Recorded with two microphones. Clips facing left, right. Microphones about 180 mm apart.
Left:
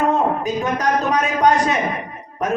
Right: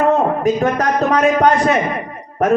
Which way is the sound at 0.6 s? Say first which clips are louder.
Right 4 dB; 55° right (ahead or behind).